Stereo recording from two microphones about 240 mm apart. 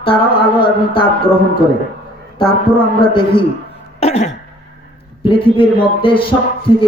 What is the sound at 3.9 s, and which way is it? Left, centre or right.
Throat clearing, left.